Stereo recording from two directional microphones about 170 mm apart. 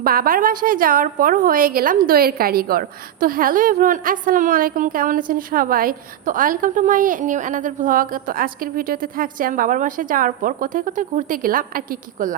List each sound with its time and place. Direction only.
0.0 s a woman's voice: 60° right (ahead or behind)